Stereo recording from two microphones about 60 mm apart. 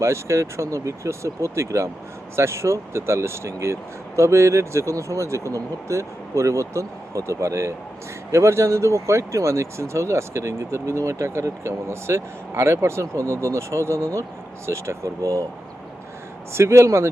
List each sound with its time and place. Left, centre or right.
0.0 s speech: right
16.5 s speech: right